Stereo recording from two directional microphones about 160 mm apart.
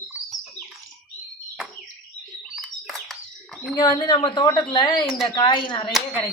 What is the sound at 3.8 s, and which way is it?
Speech, 25° left (ahead or behind).